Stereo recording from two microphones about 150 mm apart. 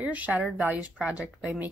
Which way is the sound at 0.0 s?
10° right (ahead or behind).